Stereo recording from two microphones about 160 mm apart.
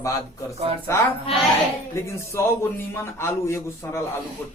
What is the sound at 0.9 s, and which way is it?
Speech, 15° left (ahead or behind).